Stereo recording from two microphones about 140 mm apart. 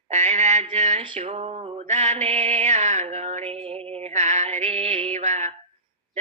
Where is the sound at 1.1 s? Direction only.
50° right (ahead or behind).